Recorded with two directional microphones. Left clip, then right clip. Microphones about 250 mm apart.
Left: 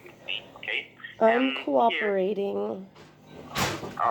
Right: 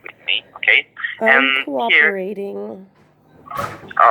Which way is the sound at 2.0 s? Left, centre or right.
Right.